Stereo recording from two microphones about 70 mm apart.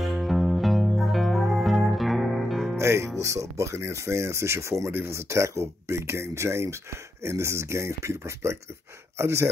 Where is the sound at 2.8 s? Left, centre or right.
Right.